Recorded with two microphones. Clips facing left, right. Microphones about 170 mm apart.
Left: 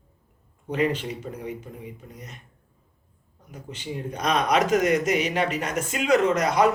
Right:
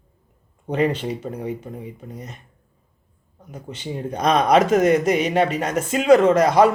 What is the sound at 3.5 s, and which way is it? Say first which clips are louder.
A man's voice: right 4 dB; 30° right (ahead or behind).